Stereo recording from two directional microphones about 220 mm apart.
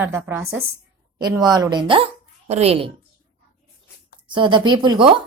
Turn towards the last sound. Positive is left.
turn(degrees=-20)  # may be behind; listen again after turning